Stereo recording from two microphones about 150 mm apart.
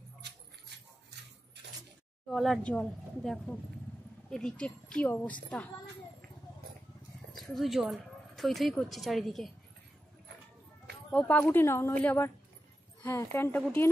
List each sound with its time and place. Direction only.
2.2 s speech: centre (ahead or behind)
7.3 s speech: centre (ahead or behind)
11.1 s speech: 10° left (ahead or behind)